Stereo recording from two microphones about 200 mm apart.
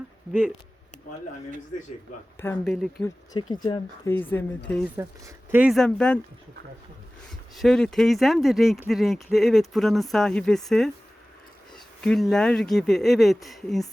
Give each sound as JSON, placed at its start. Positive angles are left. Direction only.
{"t": 2.6, "sound": "speech", "side_deg": 0}
{"t": 3.3, "sound": "speech", "side_deg": 20}
{"t": 4.9, "sound": "speech", "side_deg": -10}
{"t": 7.5, "sound": "speech", "side_deg": 0}
{"t": 12.0, "sound": "speech", "side_deg": 0}